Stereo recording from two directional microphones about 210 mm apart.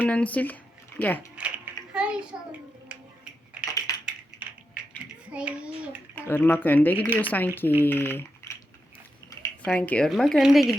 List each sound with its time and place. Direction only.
0.0 s speech: 5° left (ahead or behind)
1.4 s a sound: 5° right (ahead or behind)
2.3 s a child's voice: 10° right (ahead or behind)
2.9 s a sound: 5° right (ahead or behind)
3.8 s typing: 15° left (ahead or behind)
4.0 s typing: 5° right (ahead or behind)
5.3 s speech: 5° right (ahead or behind)
6.1 s speech: 10° left (ahead or behind)
9.6 s speech: 5° left (ahead or behind)